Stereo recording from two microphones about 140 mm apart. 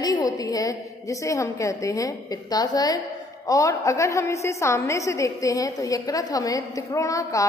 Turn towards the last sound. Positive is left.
turn(degrees=25)  # may be behind; listen again after turning